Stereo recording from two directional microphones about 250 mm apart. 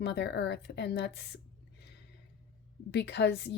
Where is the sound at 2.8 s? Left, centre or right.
Left.